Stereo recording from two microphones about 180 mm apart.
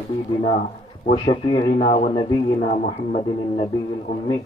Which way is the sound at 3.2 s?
25° left (ahead or behind).